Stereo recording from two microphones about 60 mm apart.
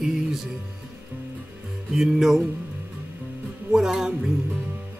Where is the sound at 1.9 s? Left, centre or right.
Centre.